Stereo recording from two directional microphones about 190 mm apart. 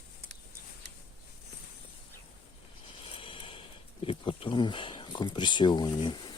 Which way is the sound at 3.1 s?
30° left (ahead or behind).